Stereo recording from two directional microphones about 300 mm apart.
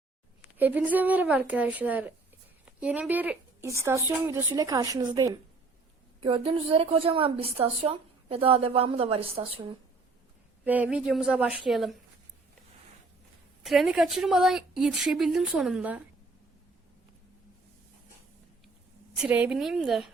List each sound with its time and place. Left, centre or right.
0.5 s a woman's voice: centre
10.6 s a woman's voice: centre
13.6 s a woman's voice: centre
19.1 s a woman's voice: centre